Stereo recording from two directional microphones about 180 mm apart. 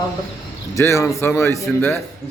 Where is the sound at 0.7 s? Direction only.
15° left (ahead or behind).